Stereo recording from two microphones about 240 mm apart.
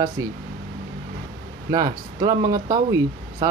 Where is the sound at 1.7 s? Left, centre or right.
Centre.